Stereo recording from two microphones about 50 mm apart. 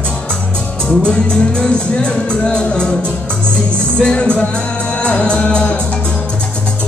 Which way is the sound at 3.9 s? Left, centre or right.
Centre.